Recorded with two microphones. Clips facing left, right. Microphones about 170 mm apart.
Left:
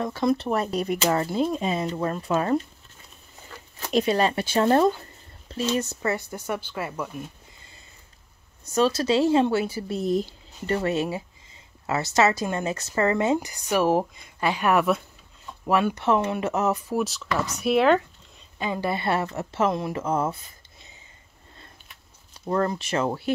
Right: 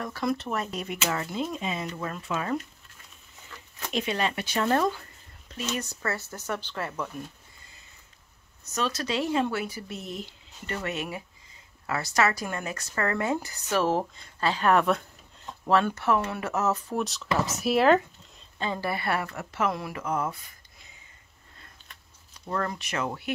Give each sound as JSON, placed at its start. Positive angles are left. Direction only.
{"t": 0.0, "sound": "speech", "side_deg": 25}
{"t": 8.7, "sound": "speech", "side_deg": 30}
{"t": 16.9, "sound": "speech", "side_deg": 0}
{"t": 18.6, "sound": "speech", "side_deg": 15}
{"t": 22.5, "sound": "speech", "side_deg": 30}